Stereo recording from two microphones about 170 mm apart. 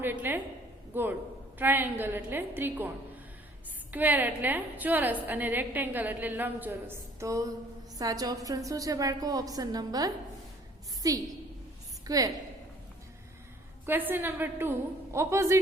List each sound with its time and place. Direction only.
0.0 s a woman's voice: 10° right (ahead or behind)
3.9 s a woman's voice: 10° right (ahead or behind)
13.8 s a woman's voice: 10° right (ahead or behind)